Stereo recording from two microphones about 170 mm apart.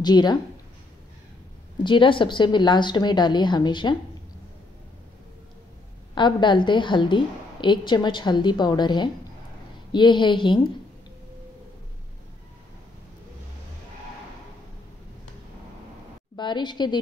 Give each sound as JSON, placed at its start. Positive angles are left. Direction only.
{"t": 0.0, "sound": "a woman's voice", "side_deg": 25}
{"t": 1.8, "sound": "a woman's voice", "side_deg": 30}
{"t": 6.1, "sound": "a woman's voice", "side_deg": 25}
{"t": 16.3, "sound": "a woman's voice", "side_deg": 25}